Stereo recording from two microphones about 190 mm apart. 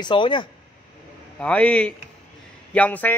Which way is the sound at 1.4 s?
5° left (ahead or behind).